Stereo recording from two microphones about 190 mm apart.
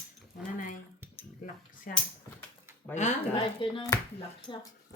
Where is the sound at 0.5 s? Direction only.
45° left (ahead or behind).